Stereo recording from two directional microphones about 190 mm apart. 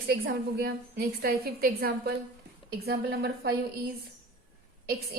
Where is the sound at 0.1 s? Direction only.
55° right (ahead or behind).